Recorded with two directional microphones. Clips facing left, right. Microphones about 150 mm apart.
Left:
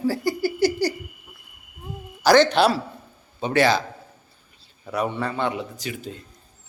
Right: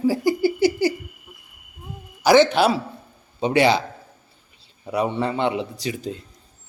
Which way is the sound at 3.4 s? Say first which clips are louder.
Right 2 dB; 15° right (ahead or behind).